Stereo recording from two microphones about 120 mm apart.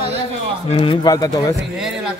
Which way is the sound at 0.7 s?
50° left (ahead or behind).